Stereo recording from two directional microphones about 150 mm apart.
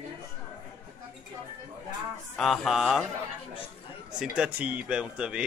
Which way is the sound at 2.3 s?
Centre (ahead or behind).